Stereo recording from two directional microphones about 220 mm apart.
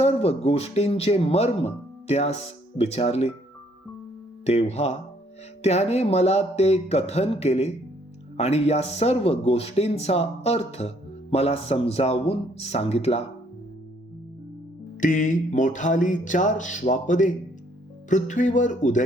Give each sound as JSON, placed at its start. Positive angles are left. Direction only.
{"t": 0.0, "sound": "speech", "side_deg": 30}
{"t": 4.4, "sound": "speech", "side_deg": 30}
{"t": 15.0, "sound": "a sound", "side_deg": 35}